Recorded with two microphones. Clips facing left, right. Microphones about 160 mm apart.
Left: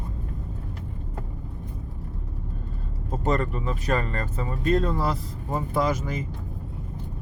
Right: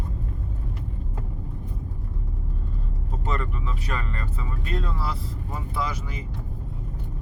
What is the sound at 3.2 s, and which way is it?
Speech, 45° left (ahead or behind).